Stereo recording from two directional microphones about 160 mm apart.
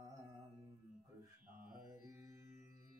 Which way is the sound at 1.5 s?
65° right (ahead or behind).